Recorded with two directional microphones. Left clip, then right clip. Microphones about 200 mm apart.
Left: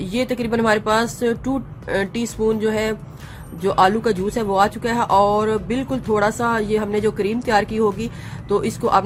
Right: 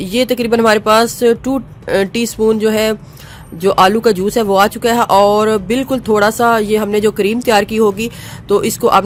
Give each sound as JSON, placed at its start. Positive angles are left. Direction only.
{"t": 0.0, "sound": "speech", "side_deg": -40}